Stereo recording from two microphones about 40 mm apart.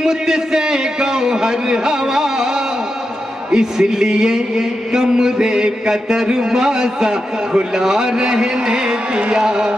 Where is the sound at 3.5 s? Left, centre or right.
Centre.